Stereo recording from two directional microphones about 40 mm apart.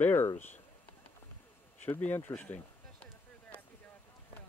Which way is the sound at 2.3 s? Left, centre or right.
Left.